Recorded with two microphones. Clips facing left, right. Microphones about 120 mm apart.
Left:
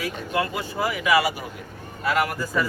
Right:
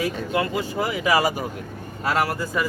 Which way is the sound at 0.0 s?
25° right (ahead or behind).